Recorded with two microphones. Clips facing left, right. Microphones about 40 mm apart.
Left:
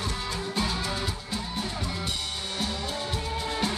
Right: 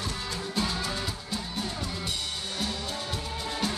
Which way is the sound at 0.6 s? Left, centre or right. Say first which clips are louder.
Even; centre.